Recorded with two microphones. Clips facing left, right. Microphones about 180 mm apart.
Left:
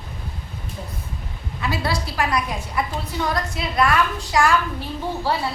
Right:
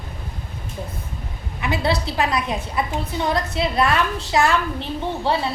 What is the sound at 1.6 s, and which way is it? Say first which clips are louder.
A woman's voice: right 3 dB; 20° right (ahead or behind).